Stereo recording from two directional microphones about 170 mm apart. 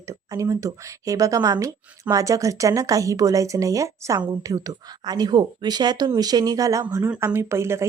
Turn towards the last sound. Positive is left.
turn(degrees=-15)  # may be behind; listen again after turning